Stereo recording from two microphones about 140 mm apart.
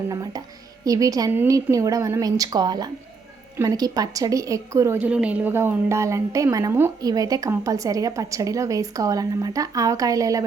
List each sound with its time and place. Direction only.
0.1 s a woman's voice: 25° right (ahead or behind)
4.9 s a woman's voice: 10° right (ahead or behind); by 10.4 s 25° right (ahead or behind)